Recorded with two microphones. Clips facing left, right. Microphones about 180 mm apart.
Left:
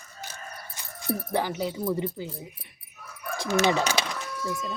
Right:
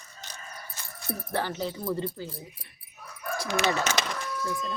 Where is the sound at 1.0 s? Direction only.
15° left (ahead or behind).